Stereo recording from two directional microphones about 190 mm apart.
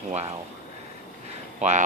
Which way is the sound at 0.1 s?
35° right (ahead or behind).